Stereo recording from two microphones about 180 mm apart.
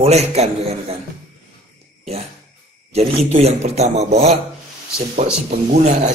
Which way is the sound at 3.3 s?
35° right (ahead or behind).